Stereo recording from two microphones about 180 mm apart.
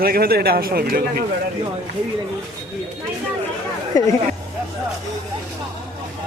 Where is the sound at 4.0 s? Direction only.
20° left (ahead or behind).